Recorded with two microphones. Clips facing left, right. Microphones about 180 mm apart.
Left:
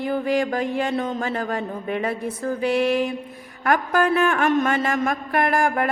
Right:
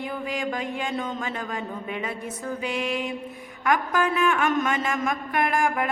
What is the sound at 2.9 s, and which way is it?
Mantra, centre (ahead or behind).